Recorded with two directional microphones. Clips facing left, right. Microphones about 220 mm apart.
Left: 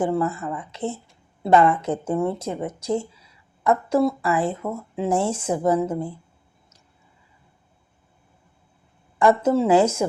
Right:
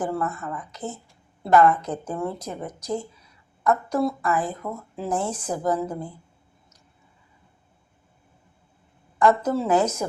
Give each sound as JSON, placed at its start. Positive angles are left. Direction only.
{"t": 0.0, "sound": "speech", "side_deg": 25}
{"t": 9.4, "sound": "speech", "side_deg": 25}